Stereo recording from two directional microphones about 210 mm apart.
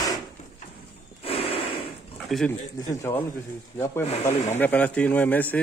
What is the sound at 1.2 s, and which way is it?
Snort, 25° left (ahead or behind).